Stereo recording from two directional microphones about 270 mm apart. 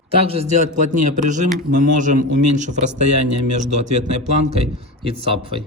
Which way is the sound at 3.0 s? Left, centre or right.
Right.